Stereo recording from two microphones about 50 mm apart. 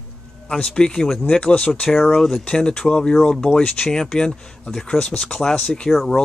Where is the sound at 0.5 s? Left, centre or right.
Centre.